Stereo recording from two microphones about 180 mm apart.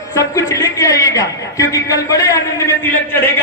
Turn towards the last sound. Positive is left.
turn(degrees=10)  # may be behind; listen again after turning